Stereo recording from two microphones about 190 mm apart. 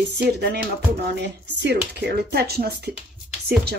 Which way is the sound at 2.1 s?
55° right (ahead or behind).